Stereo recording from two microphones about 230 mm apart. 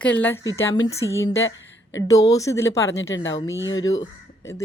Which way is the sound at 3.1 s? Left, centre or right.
Left.